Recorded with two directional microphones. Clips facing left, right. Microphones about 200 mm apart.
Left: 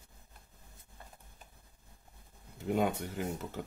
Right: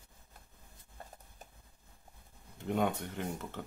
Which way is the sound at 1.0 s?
40° right (ahead or behind).